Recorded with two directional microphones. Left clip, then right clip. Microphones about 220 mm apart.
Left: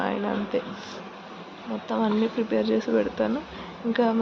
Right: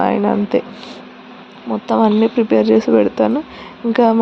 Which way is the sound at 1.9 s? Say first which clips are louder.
Right 12 dB; 40° right (ahead or behind).